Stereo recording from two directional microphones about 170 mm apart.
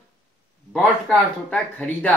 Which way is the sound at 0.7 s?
5° left (ahead or behind).